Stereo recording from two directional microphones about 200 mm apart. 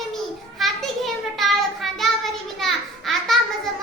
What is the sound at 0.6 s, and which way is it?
Child singing, centre (ahead or behind).